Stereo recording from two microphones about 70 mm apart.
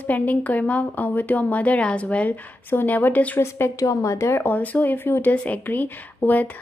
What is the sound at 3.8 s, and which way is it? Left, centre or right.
Speech, left.